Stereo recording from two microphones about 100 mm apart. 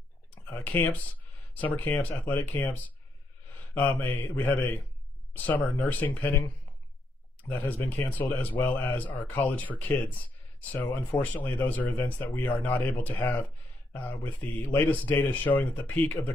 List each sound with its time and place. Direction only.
0.5 s speech: 20° left (ahead or behind)
4.0 s speech: 15° left (ahead or behind)
7.4 s speech: 15° left (ahead or behind)